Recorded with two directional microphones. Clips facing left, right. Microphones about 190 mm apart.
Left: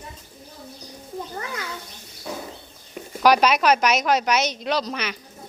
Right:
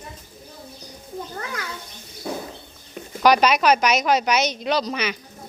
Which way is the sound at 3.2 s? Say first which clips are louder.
Right 1 dB; 5° left (ahead or behind).